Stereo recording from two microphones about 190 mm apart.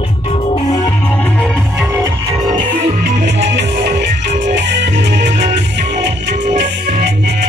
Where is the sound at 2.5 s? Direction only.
30° right (ahead or behind).